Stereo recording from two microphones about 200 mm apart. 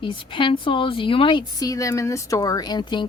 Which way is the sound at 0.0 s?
25° left (ahead or behind).